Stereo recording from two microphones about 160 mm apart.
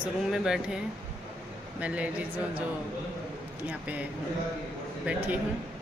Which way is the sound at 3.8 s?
10° right (ahead or behind).